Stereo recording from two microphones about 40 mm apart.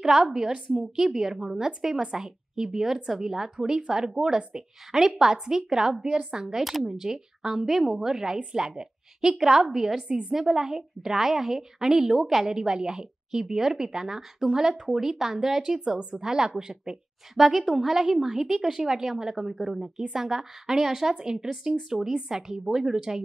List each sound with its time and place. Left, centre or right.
0.0 s a woman's voice: centre
4.4 s a woman's voice: right
4.9 s a woman's voice: centre
12.5 s a woman's voice: centre
16.9 s a woman's voice: centre